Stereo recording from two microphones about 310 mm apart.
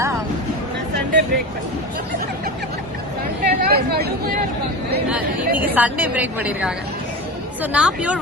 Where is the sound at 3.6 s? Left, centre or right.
Right.